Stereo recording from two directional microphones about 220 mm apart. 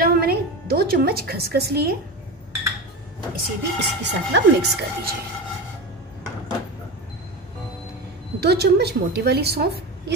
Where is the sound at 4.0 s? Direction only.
50° right (ahead or behind).